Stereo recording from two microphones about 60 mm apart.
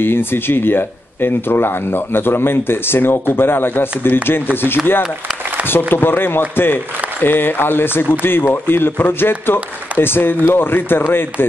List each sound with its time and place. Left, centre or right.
0.0 s speech: left
5.7 s speech: left